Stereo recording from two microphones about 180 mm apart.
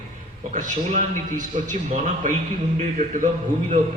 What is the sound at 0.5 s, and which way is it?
A man's voice, 40° right (ahead or behind).